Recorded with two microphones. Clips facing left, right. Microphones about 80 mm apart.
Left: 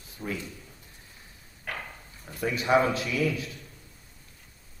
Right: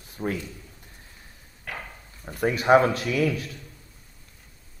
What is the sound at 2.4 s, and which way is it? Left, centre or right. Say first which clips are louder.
Speech: right 5 dB; right.